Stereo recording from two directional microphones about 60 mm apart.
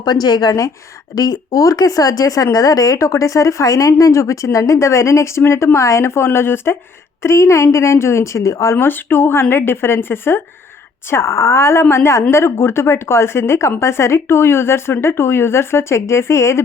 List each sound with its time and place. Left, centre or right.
1.1 s speech: left
8.7 s speech: left
11.1 s speech: left